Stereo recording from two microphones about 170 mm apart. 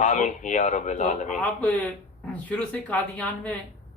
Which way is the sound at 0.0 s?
45° left (ahead or behind).